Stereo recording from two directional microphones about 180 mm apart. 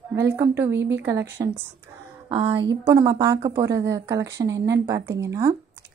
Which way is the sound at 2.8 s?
20° right (ahead or behind).